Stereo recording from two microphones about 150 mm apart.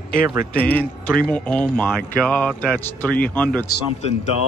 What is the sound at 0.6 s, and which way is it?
A man's voice, 10° left (ahead or behind).